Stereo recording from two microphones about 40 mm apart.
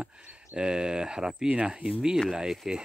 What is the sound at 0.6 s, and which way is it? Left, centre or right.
Speech, right.